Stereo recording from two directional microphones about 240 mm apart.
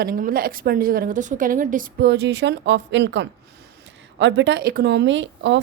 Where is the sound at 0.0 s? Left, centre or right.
Right.